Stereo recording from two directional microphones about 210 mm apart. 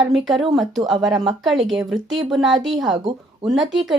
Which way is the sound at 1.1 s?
25° right (ahead or behind).